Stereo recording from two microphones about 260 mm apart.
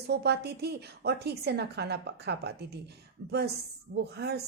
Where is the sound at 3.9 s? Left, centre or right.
Right.